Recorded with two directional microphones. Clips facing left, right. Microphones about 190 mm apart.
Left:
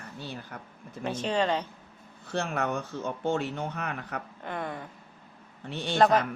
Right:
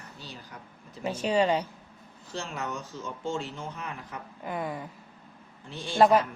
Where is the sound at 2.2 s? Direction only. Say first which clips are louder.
Left 5 dB; 60° left (ahead or behind).